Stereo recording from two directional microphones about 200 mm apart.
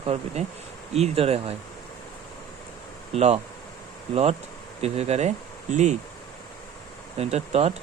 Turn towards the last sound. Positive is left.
turn(degrees=-30)  # may be behind; listen again after turning